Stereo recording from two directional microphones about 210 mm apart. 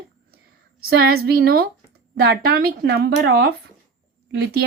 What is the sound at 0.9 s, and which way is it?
A woman's voice, 45° right (ahead or behind).